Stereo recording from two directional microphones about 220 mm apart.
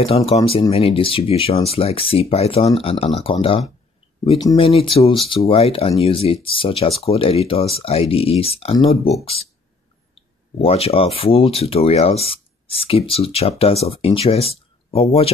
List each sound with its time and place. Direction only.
0.3 s speech: 25° left (ahead or behind)